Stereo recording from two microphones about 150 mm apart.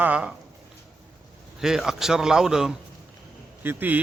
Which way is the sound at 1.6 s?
5° right (ahead or behind).